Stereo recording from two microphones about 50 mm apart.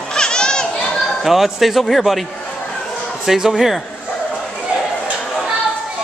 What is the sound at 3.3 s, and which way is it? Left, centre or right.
Speech, centre.